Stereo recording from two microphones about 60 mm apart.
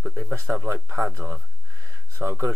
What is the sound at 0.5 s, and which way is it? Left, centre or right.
Speech, right.